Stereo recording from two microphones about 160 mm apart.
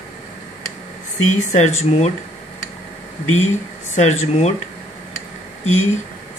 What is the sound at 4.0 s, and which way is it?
Speech, 45° left (ahead or behind).